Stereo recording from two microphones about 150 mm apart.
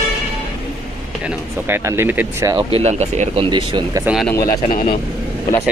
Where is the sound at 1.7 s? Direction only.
15° right (ahead or behind).